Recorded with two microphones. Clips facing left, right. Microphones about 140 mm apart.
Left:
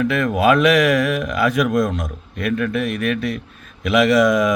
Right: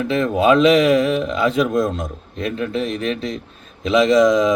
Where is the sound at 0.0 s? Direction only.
25° right (ahead or behind).